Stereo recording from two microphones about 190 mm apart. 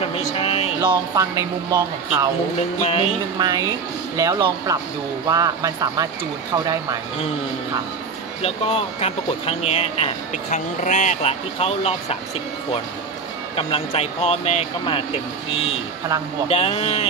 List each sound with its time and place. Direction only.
0.4 s music: 30° left (ahead or behind)
0.7 s speech: 15° right (ahead or behind)
2.8 s speech: 30° left (ahead or behind)
3.3 s speech: 20° right (ahead or behind)
8.4 s speech: 30° left (ahead or behind)
13.6 s speech: 30° left (ahead or behind)